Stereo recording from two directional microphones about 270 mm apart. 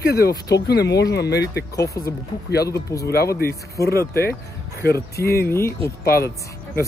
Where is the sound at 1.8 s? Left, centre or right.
Centre.